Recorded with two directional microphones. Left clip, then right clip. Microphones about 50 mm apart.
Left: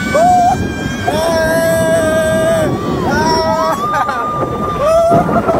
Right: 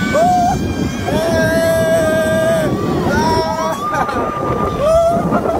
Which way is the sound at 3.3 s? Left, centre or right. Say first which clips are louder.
Left 3 dB; left.